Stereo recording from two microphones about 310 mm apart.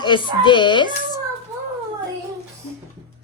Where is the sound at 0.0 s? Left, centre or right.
Centre.